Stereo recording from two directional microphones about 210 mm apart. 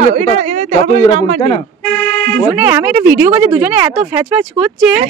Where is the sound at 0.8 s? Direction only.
35° right (ahead or behind).